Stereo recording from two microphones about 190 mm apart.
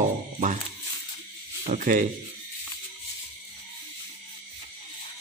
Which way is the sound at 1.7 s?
40° right (ahead or behind).